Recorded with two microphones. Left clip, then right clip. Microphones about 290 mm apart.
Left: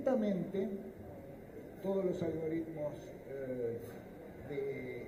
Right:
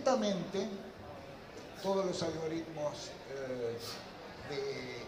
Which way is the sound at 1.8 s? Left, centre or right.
Centre.